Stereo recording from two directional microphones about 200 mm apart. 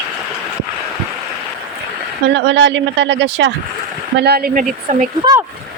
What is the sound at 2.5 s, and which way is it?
Speech, 60° right (ahead or behind).